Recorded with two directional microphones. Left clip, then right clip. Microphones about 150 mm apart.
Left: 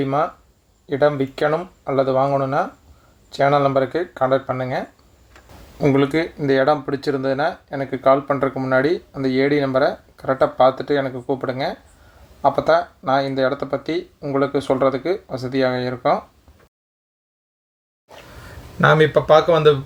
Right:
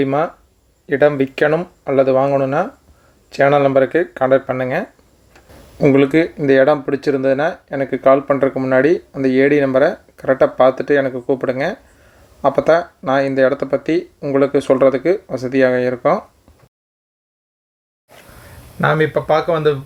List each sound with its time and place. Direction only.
0.0 s speech: 25° right (ahead or behind)
18.8 s speech: 10° right (ahead or behind)